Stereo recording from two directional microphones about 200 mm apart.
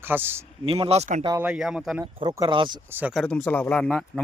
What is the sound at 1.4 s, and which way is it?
Speech, 5° right (ahead or behind).